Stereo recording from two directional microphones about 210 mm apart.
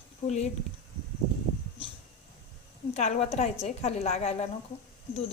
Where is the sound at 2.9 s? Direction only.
30° left (ahead or behind).